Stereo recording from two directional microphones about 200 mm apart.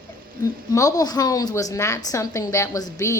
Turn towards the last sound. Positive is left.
turn(degrees=15)  # may be behind; listen again after turning